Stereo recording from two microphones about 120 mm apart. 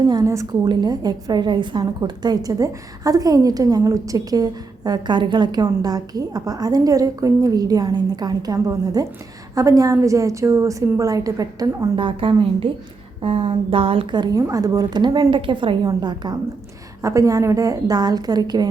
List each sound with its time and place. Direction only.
0.0 s a woman's voice: 35° right (ahead or behind)
11.9 s a woman's voice: 45° right (ahead or behind)
14.4 s a woman's voice: 30° right (ahead or behind)